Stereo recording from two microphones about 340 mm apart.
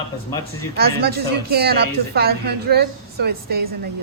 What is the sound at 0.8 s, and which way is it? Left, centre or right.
A woman's voice, right.